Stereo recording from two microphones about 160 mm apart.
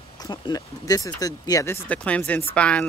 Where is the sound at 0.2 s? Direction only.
25° left (ahead or behind).